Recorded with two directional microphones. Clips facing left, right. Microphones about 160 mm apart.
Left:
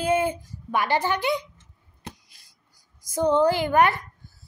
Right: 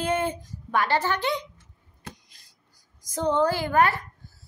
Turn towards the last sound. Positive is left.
turn(degrees=20)  # may be behind; listen again after turning